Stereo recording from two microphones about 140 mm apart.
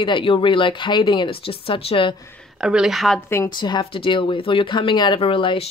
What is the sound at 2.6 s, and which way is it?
Speech, 5° right (ahead or behind).